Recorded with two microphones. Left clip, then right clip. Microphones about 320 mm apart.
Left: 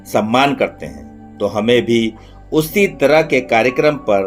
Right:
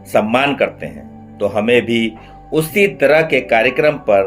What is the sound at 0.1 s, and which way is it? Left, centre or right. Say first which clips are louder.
A man's voice: even; left.